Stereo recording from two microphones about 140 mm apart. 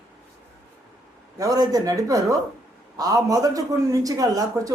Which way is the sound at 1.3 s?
25° right (ahead or behind).